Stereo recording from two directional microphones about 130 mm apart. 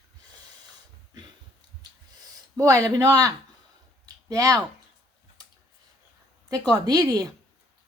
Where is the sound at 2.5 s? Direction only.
25° right (ahead or behind).